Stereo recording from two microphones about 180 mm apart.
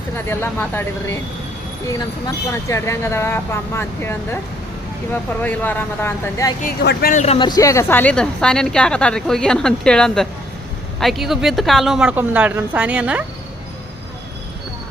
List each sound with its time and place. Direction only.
0.3 s speech: 10° left (ahead or behind)
6.6 s speech: 55° left (ahead or behind)
7.2 s speech: 35° left (ahead or behind)
7.4 s a woman's voice: 20° left (ahead or behind); by 13.2 s 5° right (ahead or behind)